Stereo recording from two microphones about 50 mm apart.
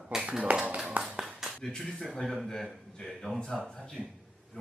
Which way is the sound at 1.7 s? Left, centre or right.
Centre.